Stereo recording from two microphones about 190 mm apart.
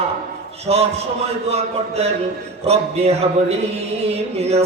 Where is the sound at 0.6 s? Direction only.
35° right (ahead or behind).